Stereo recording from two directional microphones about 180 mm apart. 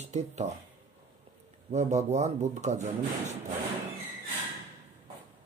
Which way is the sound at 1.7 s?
40° right (ahead or behind).